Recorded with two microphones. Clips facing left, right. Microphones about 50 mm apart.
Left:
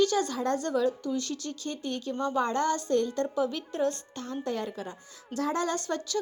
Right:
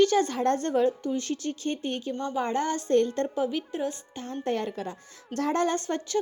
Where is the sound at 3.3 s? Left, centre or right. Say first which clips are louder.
Right 1 dB; centre.